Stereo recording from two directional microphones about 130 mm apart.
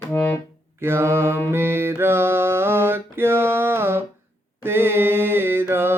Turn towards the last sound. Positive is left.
turn(degrees=-15)  # may be behind; listen again after turning